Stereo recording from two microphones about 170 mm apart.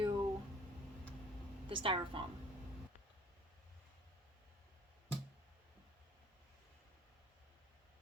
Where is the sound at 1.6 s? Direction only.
30° right (ahead or behind).